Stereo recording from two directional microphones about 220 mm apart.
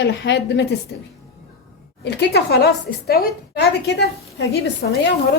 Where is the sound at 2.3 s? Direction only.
45° left (ahead or behind).